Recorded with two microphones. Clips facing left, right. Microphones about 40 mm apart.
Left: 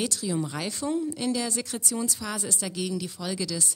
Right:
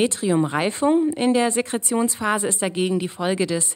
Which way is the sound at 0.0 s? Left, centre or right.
Right.